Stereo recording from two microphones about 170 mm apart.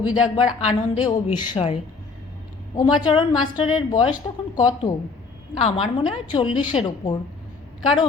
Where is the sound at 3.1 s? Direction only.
30° left (ahead or behind).